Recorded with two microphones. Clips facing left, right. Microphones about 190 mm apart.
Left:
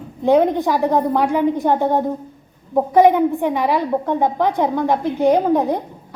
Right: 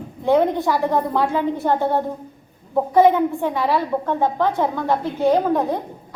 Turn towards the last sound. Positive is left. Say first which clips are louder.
# left 2 dB
turn(degrees=20)  # may be behind; listen again after turning